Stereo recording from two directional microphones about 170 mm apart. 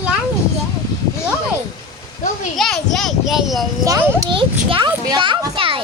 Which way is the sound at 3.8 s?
25° right (ahead or behind).